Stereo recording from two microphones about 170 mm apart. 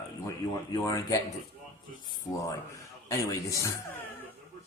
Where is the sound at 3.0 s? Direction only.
20° left (ahead or behind).